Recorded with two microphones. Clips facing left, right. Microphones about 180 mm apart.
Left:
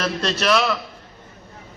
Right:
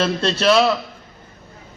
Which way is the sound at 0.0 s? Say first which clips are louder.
Right 4 dB; 30° right (ahead or behind).